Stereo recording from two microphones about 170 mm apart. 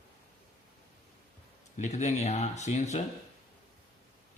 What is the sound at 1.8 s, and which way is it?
A man's voice, 40° left (ahead or behind).